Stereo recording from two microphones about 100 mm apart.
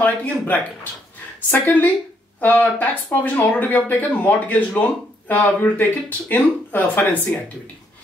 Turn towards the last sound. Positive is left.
turn(degrees=15)  # may be behind; listen again after turning